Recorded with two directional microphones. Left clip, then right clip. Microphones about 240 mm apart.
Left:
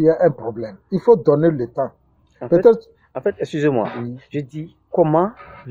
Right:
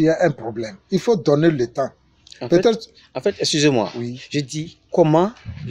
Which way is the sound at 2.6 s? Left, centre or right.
Right.